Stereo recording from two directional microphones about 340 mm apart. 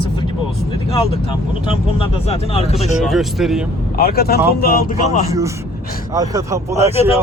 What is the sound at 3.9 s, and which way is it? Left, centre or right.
Speech, left.